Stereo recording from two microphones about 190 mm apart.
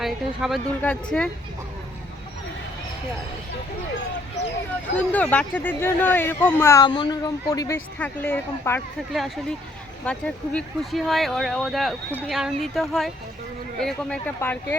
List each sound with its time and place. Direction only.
0.0 s speech: centre (ahead or behind)
4.9 s speech: 10° left (ahead or behind)
7.9 s speech: 10° left (ahead or behind)
9.1 s speech: centre (ahead or behind)